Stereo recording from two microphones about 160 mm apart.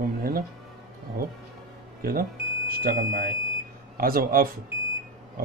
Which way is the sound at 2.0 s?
65° right (ahead or behind).